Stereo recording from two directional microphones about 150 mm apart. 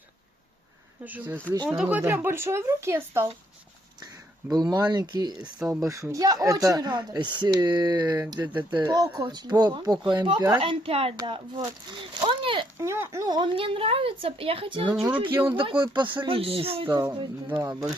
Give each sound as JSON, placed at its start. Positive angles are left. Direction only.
{"t": 1.0, "sound": "speech", "side_deg": -10}
{"t": 4.5, "sound": "speech", "side_deg": -25}
{"t": 5.3, "sound": "speech", "side_deg": -5}
{"t": 5.8, "sound": "speech", "side_deg": -20}
{"t": 12.7, "sound": "speech", "side_deg": -20}
{"t": 14.8, "sound": "speech", "side_deg": -10}
{"t": 15.4, "sound": "speech", "side_deg": -35}
{"t": 17.4, "sound": "speech", "side_deg": -15}